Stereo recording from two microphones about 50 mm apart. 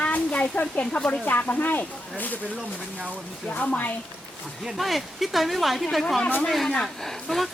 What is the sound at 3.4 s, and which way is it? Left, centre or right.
Speech, left.